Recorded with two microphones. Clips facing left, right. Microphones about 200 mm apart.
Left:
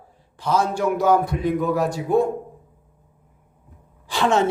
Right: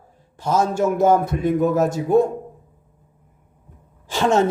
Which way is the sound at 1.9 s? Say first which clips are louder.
Right 3 dB; 20° right (ahead or behind).